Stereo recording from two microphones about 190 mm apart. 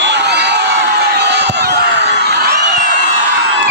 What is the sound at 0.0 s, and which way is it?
Crowd, 65° right (ahead or behind).